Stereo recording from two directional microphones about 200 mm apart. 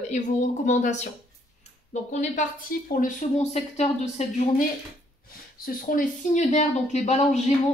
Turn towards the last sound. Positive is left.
turn(degrees=35)  # may be behind; listen again after turning